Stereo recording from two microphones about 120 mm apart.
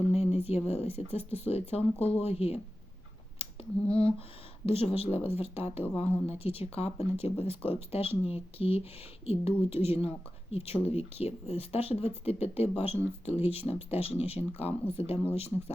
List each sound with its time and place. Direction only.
0.0 s speech: 60° left (ahead or behind)
4.6 s speech: 55° left (ahead or behind)